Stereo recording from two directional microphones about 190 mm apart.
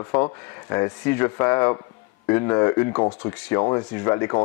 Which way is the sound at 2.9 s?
30° left (ahead or behind).